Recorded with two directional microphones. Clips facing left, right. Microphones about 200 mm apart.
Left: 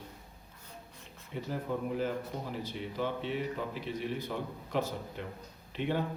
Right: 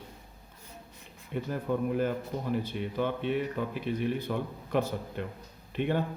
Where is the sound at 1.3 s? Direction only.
55° right (ahead or behind).